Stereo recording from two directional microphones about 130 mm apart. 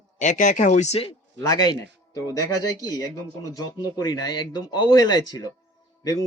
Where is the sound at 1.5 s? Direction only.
30° left (ahead or behind).